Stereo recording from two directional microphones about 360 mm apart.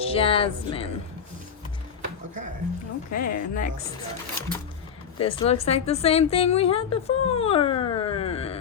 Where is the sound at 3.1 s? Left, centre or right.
Left.